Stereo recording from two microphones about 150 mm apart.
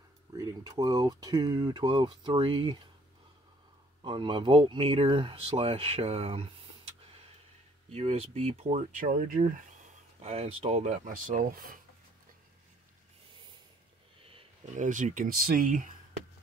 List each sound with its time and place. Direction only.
0.3 s speech: 25° right (ahead or behind)
4.0 s speech: 30° right (ahead or behind)
7.9 s speech: 45° right (ahead or behind)
9.0 s speech: 65° right (ahead or behind)
10.2 s speech: 45° right (ahead or behind); by 11.8 s 65° right (ahead or behind)
14.8 s speech: 55° right (ahead or behind)